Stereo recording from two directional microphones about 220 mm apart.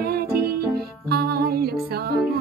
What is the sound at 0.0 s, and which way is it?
Music, 45° right (ahead or behind).